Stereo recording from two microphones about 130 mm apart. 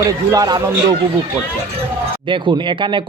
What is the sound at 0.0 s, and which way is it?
Speech, 25° right (ahead or behind).